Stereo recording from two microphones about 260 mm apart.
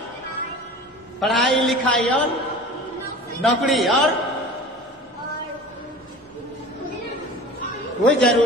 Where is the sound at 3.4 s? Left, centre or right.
Centre.